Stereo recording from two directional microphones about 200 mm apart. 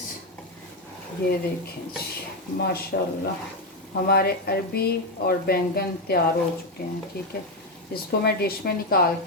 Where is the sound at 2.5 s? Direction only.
50° left (ahead or behind).